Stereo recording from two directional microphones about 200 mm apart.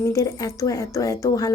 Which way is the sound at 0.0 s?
15° left (ahead or behind).